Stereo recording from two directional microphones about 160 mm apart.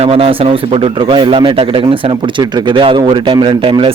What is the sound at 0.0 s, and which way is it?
A man's voice, 35° right (ahead or behind).